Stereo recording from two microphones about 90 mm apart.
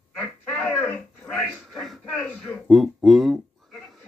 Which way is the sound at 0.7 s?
20° left (ahead or behind).